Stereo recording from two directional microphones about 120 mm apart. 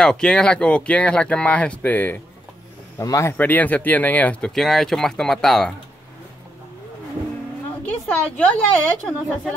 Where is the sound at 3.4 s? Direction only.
15° left (ahead or behind).